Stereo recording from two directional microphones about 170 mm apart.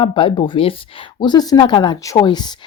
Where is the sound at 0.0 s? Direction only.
30° left (ahead or behind).